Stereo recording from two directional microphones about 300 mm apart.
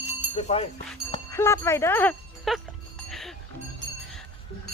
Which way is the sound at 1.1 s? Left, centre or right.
Centre.